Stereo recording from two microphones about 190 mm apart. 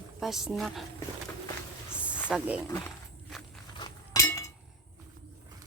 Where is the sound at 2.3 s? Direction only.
5° right (ahead or behind).